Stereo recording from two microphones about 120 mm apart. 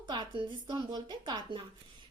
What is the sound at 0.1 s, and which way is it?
A woman's voice, 40° right (ahead or behind).